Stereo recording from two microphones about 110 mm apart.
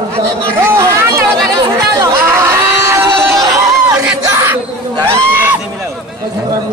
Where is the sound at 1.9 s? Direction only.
25° right (ahead or behind).